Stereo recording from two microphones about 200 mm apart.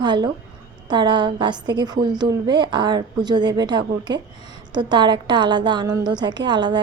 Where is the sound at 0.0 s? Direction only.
20° right (ahead or behind).